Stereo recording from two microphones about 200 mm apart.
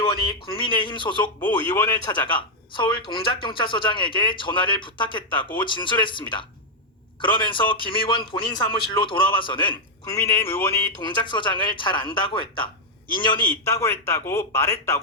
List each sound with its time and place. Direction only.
0.0 s speech: 25° left (ahead or behind)
1.4 s speech: 10° left (ahead or behind)
9.7 s a man's voice: 15° left (ahead or behind)
11.0 s a man's voice: 25° left (ahead or behind)